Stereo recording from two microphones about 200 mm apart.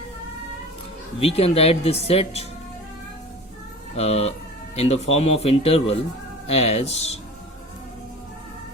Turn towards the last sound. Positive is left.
turn(degrees=30)  # may be behind; listen again after turning